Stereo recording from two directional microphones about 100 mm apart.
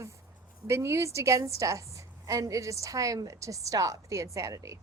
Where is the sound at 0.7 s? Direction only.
30° right (ahead or behind).